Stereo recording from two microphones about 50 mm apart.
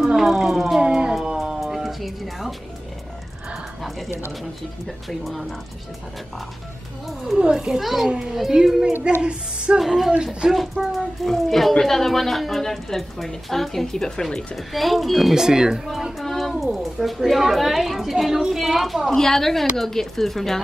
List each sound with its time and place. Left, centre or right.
0.0 s speech: centre
1.2 s music: centre
5.2 s a woman's voice: centre
7.3 s speech: centre
7.8 s a woman's voice: centre
9.2 s a woman's voice: right
9.8 s a woman's voice: centre
14.5 s a woman's voice: centre
15.3 s speech: centre
16.2 s music: centre
16.6 s a woman's voice: centre